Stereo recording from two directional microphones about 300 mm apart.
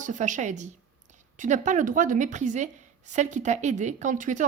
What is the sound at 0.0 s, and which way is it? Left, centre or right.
Speech, right.